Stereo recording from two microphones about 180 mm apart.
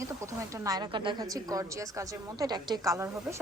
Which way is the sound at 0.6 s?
20° right (ahead or behind).